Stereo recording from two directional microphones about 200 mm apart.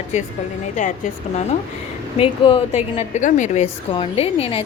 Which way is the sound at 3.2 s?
40° left (ahead or behind).